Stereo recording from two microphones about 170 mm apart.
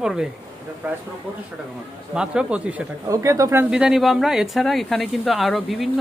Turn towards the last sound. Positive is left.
turn(degrees=0)  # may be behind; listen again after turning